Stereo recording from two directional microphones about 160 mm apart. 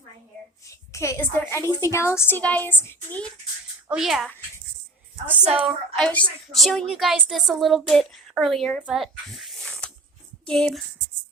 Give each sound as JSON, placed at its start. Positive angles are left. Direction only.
{"t": 0.9, "sound": "speech", "side_deg": 15}
{"t": 3.8, "sound": "a woman's voice", "side_deg": -5}
{"t": 5.4, "sound": "a woman's voice", "side_deg": -40}
{"t": 5.6, "sound": "a woman's voice", "side_deg": 5}